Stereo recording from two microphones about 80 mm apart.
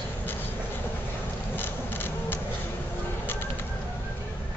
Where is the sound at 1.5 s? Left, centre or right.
Left.